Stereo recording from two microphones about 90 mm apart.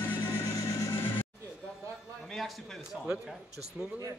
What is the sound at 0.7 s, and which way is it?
Vehicle, 30° left (ahead or behind).